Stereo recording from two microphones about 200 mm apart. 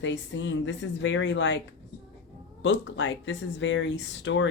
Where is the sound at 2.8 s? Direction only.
65° left (ahead or behind).